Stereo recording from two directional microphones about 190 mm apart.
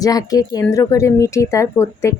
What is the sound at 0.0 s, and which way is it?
Speech, 20° left (ahead or behind).